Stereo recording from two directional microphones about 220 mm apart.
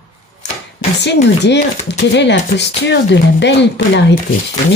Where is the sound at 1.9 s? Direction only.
50° left (ahead or behind).